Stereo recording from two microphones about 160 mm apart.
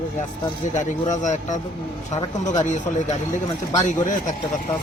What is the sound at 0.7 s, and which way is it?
Speech, 50° left (ahead or behind).